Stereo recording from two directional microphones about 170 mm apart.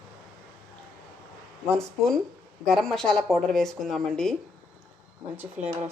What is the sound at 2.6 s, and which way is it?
Speech, 5° left (ahead or behind).